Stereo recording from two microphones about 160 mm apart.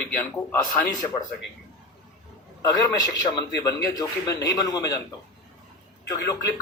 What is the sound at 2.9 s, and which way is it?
A man's voice, 20° left (ahead or behind).